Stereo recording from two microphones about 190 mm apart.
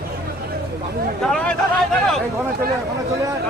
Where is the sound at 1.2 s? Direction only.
5° left (ahead or behind).